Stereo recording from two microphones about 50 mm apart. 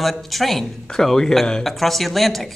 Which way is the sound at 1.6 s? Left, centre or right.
Centre.